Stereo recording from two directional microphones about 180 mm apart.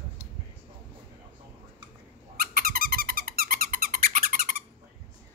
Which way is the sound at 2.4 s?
55° right (ahead or behind).